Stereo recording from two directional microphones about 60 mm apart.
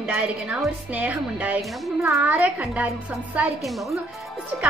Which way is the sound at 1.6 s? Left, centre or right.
Centre.